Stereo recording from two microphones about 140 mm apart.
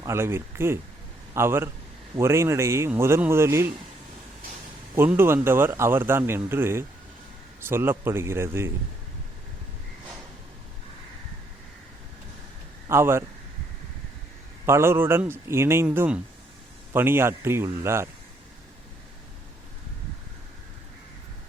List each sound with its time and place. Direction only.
0.0 s a man's voice: 20° right (ahead or behind)
4.9 s speech: 15° right (ahead or behind)
12.9 s speech: 20° right (ahead or behind)
14.7 s speech: 20° right (ahead or behind)